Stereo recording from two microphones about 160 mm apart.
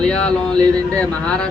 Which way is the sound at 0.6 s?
25° right (ahead or behind).